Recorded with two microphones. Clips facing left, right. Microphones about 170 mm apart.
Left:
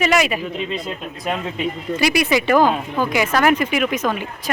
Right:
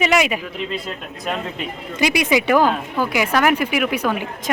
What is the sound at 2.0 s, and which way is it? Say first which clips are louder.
Speech: right 1 dB; 15° right (ahead or behind).